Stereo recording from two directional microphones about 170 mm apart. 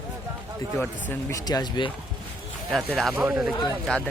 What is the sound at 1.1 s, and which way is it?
Speech, 20° left (ahead or behind).